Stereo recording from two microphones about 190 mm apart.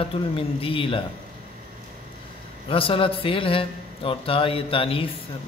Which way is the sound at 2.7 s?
30° left (ahead or behind).